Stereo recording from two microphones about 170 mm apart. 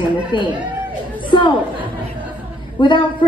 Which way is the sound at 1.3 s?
30° left (ahead or behind).